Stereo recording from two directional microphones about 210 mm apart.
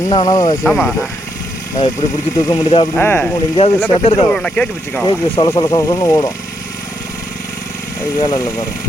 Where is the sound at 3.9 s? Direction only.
25° left (ahead or behind).